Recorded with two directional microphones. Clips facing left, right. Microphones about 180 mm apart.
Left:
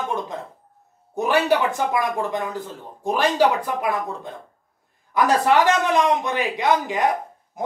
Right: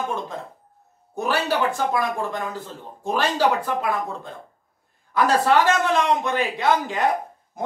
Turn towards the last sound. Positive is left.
turn(degrees=15)  # may be behind; listen again after turning